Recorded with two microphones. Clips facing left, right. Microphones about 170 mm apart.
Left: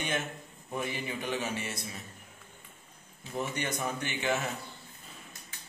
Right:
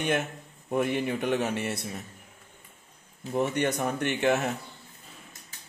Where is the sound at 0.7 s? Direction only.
60° right (ahead or behind).